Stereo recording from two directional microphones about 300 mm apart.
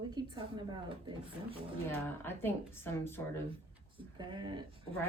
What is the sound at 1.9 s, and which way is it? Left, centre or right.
Speech, centre.